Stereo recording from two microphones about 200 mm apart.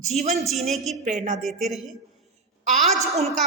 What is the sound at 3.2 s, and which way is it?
Speech, centre (ahead or behind).